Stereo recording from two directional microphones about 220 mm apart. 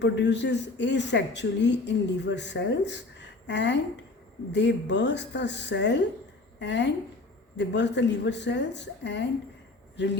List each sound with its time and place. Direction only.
0.0 s speech: 50° left (ahead or behind)